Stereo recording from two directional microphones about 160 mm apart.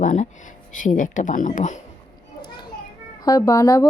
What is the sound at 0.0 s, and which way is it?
Speech, 50° left (ahead or behind).